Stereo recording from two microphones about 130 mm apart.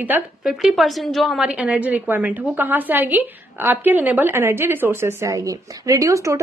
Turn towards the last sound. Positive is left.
turn(degrees=-25)  # may be behind; listen again after turning